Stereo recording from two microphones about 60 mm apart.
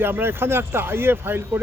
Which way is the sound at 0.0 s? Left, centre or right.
Right.